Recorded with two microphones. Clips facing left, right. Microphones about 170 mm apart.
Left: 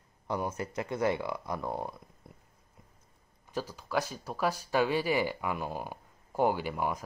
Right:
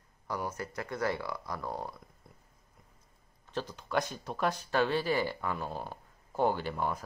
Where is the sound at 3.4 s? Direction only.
10° left (ahead or behind).